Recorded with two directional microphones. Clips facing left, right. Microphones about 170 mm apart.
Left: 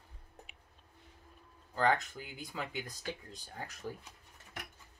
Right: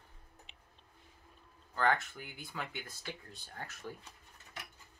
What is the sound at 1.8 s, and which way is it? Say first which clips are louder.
Speech: left 1 dB; 15° left (ahead or behind).